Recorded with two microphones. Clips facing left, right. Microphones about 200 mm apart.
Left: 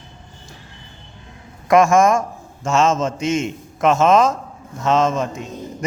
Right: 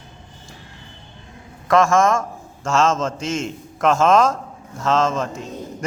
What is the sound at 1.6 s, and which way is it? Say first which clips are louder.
Speech: left 3 dB; 15° left (ahead or behind).